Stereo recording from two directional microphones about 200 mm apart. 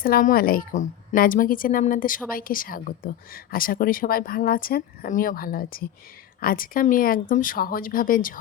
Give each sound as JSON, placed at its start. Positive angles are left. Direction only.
{"t": 0.0, "sound": "a woman's voice", "side_deg": 45}